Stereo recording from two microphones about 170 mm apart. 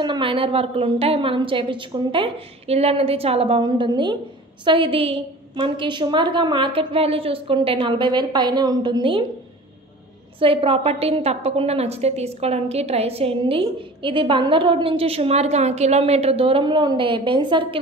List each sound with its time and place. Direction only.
0.0 s a woman's voice: 30° right (ahead or behind)
10.4 s a woman's voice: 30° right (ahead or behind)